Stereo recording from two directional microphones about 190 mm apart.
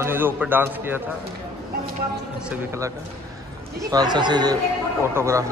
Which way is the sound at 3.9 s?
20° right (ahead or behind).